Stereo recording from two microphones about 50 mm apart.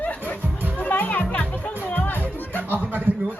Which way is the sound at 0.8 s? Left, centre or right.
Left.